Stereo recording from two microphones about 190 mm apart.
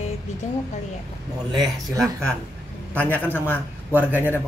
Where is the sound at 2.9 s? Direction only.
10° left (ahead or behind).